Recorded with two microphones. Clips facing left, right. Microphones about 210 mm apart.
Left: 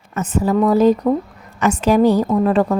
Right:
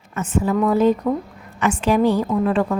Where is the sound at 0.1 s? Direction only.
40° left (ahead or behind).